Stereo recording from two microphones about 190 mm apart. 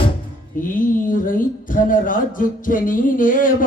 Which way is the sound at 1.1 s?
45° left (ahead or behind).